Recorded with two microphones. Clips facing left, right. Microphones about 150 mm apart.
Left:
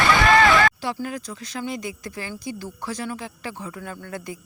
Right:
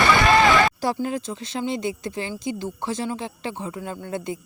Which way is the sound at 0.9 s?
25° right (ahead or behind).